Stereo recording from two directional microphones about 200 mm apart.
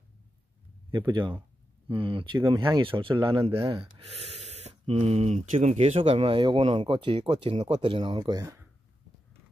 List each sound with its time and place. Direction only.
0.9 s speech: 25° right (ahead or behind)
3.8 s speech: 30° right (ahead or behind)